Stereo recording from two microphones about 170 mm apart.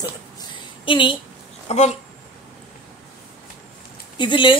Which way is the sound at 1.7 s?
40° left (ahead or behind).